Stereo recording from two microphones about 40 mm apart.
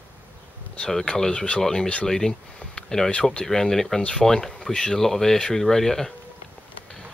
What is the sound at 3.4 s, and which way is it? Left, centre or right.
Speech, centre.